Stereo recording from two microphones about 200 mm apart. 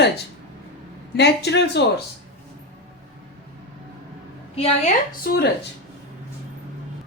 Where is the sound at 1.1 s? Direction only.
55° left (ahead or behind).